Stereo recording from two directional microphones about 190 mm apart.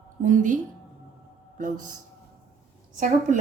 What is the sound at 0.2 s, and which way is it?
Speech, 40° right (ahead or behind).